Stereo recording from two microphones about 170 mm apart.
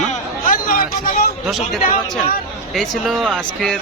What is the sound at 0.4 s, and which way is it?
Hubbub, 55° left (ahead or behind).